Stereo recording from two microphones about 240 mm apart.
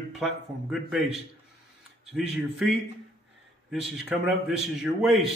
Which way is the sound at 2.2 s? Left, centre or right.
Centre.